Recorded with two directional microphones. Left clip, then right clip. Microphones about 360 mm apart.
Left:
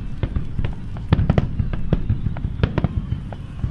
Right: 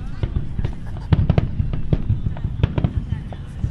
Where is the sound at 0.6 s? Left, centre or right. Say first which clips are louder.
Left 2 dB; centre.